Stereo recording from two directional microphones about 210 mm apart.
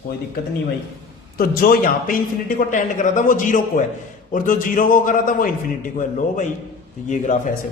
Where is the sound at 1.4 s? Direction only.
45° left (ahead or behind).